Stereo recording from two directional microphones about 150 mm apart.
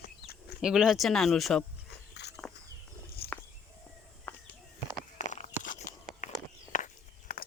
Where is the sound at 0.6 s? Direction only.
5° right (ahead or behind).